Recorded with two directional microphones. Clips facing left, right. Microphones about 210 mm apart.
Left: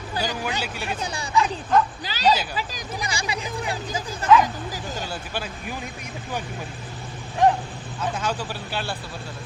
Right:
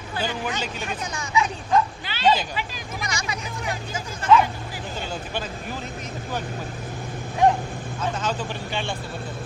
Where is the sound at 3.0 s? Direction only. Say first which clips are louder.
Left 2 dB; 30° left (ahead or behind).